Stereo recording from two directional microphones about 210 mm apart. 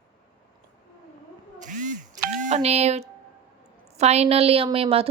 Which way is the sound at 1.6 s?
35° right (ahead or behind).